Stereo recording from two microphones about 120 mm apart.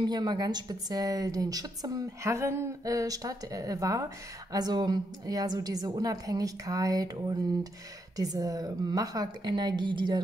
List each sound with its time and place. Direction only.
0.0 s a woman's voice: 35° right (ahead or behind)